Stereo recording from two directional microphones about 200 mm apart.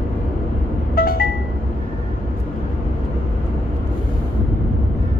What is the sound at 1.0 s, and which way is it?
Music, 45° left (ahead or behind).